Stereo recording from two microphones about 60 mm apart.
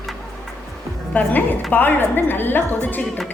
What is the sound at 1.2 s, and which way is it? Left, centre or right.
A woman's voice, left.